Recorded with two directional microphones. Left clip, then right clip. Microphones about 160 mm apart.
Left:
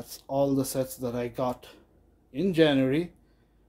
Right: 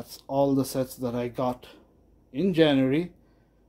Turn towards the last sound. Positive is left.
turn(degrees=-25)  # may be behind; listen again after turning